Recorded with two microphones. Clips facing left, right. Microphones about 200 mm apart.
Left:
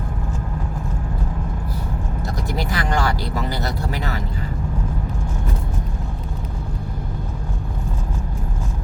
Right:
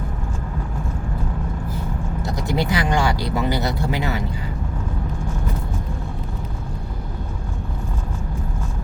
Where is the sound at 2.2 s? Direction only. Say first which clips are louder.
Right 4 dB; 20° right (ahead or behind).